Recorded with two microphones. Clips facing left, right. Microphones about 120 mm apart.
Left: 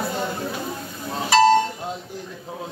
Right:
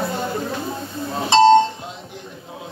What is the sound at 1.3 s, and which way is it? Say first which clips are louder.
Music: right 4 dB; 25° right (ahead or behind).